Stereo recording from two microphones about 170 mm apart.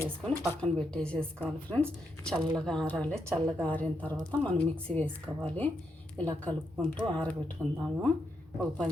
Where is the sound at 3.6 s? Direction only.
10° left (ahead or behind).